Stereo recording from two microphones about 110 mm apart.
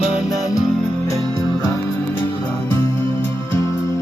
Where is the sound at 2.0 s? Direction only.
15° left (ahead or behind).